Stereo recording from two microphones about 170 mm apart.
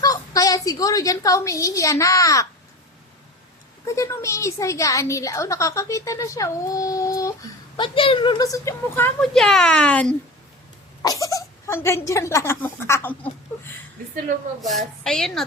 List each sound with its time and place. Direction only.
0.0 s a woman's voice: 20° left (ahead or behind)
3.8 s a woman's voice: 15° left (ahead or behind)
7.8 s a woman's voice: 30° left (ahead or behind); by 9.1 s 15° left (ahead or behind)
9.2 s a child's voice: centre (ahead or behind)
11.0 s a woman's voice: 20° left (ahead or behind)
14.6 s a child's voice: centre (ahead or behind)